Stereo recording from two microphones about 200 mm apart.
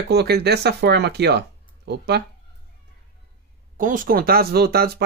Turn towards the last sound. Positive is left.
turn(degrees=-50)  # may be behind; listen again after turning